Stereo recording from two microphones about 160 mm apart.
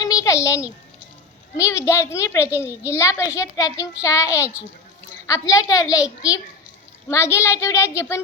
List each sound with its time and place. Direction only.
0.0 s a sound: 20° left (ahead or behind)
1.5 s a child's voice: 20° left (ahead or behind)
7.1 s a child's voice: 20° left (ahead or behind)